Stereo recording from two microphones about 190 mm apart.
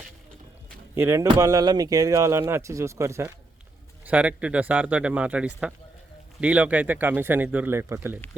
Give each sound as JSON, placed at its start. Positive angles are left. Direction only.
{"t": 0.9, "sound": "speech", "side_deg": -15}